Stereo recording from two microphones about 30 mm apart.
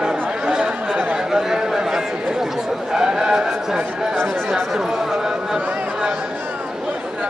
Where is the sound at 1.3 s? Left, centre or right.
Centre.